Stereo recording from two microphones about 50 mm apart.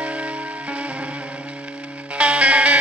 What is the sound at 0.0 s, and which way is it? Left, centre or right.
Music, right.